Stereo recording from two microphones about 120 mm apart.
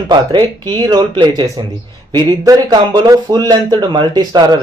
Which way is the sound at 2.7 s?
40° right (ahead or behind).